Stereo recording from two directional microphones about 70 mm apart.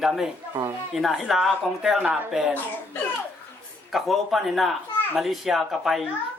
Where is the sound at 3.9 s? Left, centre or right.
Centre.